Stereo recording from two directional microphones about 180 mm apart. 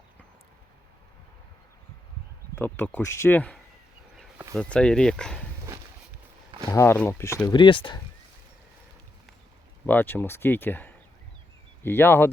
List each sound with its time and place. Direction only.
2.6 s speech: 10° left (ahead or behind)
6.7 s speech: 15° left (ahead or behind)
7.4 s speech: 25° left (ahead or behind)
9.8 s speech: 10° left (ahead or behind)